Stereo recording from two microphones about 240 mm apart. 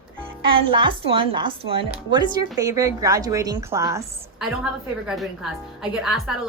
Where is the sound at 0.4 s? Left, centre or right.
Right.